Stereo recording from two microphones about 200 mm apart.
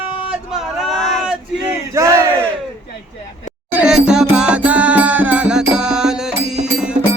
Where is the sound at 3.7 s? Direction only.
5° right (ahead or behind).